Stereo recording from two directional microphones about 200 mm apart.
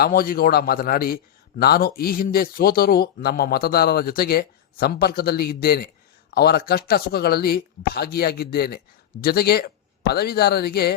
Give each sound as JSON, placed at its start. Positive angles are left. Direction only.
{"t": 0.0, "sound": "a man's voice", "side_deg": 45}